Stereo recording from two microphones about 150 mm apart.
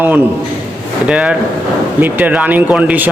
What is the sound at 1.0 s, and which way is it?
Speech, 10° right (ahead or behind).